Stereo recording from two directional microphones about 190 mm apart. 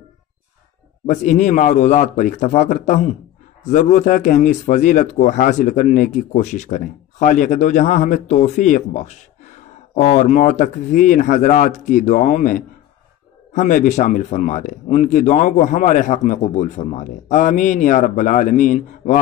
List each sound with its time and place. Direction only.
1.0 s speech: 40° left (ahead or behind)